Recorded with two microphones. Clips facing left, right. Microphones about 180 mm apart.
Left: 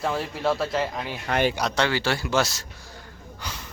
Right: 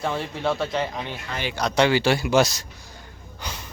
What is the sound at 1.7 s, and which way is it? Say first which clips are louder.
Speech: right 5 dB; 15° right (ahead or behind).